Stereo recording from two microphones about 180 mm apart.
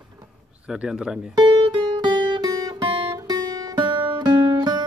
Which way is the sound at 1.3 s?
25° right (ahead or behind).